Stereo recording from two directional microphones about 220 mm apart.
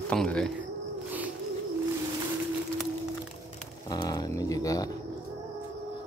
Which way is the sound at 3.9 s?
20° left (ahead or behind).